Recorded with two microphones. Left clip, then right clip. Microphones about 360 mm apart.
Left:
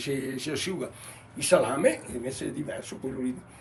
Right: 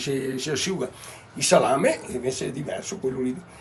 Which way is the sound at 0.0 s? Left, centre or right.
Centre.